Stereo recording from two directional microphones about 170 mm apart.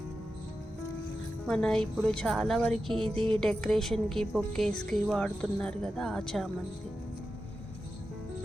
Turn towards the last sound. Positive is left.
turn(degrees=0)  # may be behind; listen again after turning